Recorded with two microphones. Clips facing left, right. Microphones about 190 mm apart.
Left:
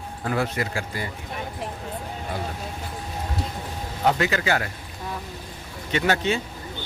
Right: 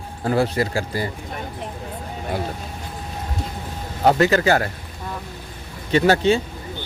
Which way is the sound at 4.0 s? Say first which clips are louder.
Right 6 dB; 40° right (ahead or behind).